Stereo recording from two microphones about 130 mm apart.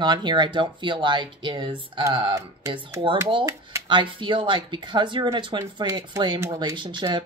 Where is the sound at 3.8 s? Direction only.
40° right (ahead or behind).